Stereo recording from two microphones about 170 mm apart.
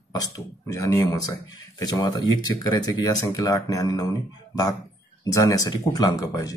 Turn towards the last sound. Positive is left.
turn(degrees=20)  # may be behind; listen again after turning